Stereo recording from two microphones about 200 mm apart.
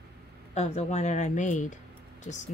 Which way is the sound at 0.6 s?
35° left (ahead or behind).